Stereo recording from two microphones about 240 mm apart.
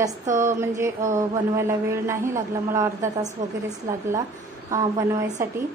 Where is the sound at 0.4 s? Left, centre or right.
Centre.